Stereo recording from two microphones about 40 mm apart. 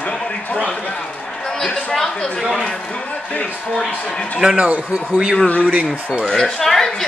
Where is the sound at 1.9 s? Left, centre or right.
Centre.